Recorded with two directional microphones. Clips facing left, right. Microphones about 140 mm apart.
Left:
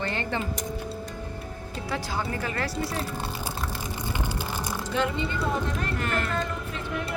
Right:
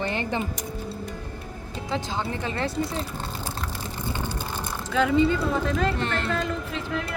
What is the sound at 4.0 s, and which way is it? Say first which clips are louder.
Vehicle: right 2 dB; 15° left (ahead or behind).